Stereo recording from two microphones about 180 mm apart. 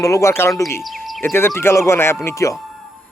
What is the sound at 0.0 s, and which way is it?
Speech, 15° left (ahead or behind).